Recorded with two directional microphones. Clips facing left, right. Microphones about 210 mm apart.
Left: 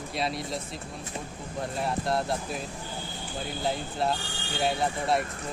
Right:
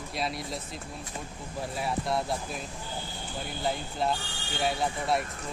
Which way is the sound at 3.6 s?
Centre (ahead or behind).